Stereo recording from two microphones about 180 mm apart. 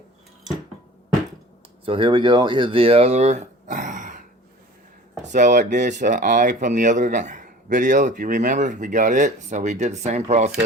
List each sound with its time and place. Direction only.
1.8 s speech: 30° right (ahead or behind); by 4.2 s 45° right (ahead or behind)
5.3 s speech: 45° right (ahead or behind)